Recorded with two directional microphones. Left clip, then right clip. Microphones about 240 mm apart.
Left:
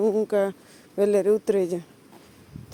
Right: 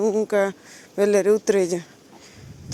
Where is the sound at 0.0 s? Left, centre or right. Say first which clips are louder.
Right 2 dB; centre.